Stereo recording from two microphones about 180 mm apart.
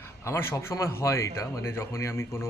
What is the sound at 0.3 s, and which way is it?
A man's voice, 15° left (ahead or behind).